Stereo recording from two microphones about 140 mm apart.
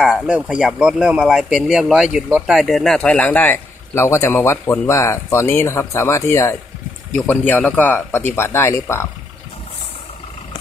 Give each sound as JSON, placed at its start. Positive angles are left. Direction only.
{"t": 0.0, "sound": "speech", "side_deg": -5}